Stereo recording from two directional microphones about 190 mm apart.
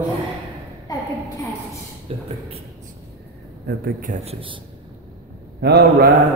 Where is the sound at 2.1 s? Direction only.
30° right (ahead or behind).